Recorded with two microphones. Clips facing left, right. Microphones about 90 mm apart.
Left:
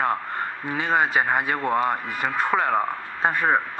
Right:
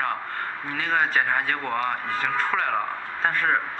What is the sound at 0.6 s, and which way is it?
A man's voice, 20° left (ahead or behind).